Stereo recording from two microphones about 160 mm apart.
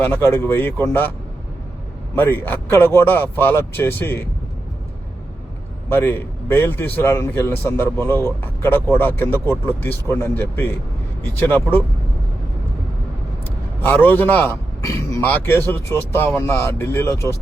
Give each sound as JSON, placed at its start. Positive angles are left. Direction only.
{"t": 0.0, "sound": "a man's voice", "side_deg": 15}
{"t": 2.1, "sound": "a man's voice", "side_deg": 15}
{"t": 5.9, "sound": "a man's voice", "side_deg": 15}
{"t": 13.8, "sound": "a man's voice", "side_deg": 10}